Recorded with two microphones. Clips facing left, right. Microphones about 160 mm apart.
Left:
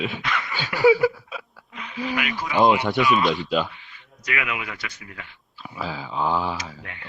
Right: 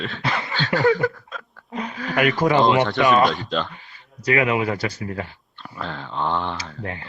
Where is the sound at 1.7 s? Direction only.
40° right (ahead or behind).